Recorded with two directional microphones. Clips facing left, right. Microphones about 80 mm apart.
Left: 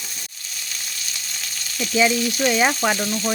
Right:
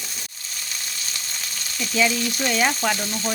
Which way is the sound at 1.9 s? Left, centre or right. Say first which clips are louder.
Left 3 dB; centre.